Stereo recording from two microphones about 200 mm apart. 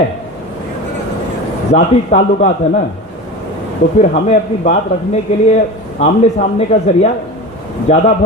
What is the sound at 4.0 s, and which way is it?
Speech, 35° left (ahead or behind).